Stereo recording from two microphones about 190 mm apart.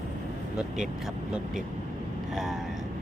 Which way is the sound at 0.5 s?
5° right (ahead or behind).